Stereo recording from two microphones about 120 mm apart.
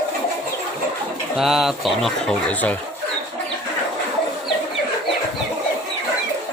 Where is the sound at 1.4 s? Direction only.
5° right (ahead or behind).